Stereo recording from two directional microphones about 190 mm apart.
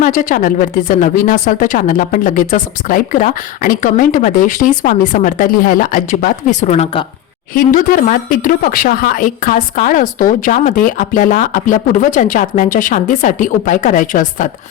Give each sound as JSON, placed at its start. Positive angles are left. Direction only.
{"t": 0.0, "sound": "speech", "side_deg": 45}
{"t": 7.5, "sound": "speech", "side_deg": 45}